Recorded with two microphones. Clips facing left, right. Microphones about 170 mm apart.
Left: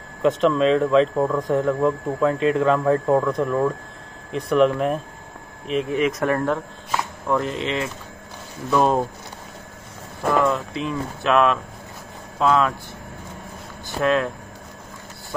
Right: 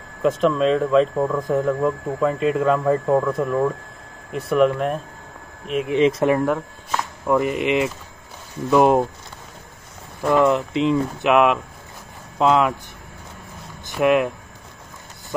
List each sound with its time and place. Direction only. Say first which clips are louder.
0.2 s speech: even; centre (ahead or behind)
5.9 s speech: right 6 dB; 25° right (ahead or behind)
6.3 s speech: right 2 dB; 10° right (ahead or behind)
10.3 s speech: right 4 dB; 20° right (ahead or behind)
13.8 s speech: right 3 dB; 15° right (ahead or behind)